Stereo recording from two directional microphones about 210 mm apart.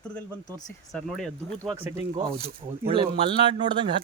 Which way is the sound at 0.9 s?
5° left (ahead or behind).